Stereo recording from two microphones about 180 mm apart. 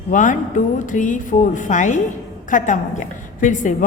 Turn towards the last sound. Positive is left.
turn(degrees=45)  # may be behind; listen again after turning